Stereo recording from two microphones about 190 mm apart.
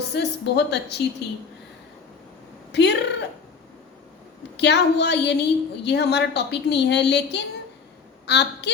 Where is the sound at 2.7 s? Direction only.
65° left (ahead or behind).